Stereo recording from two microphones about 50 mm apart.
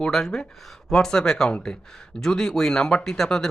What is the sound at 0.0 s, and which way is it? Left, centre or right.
Speech, centre.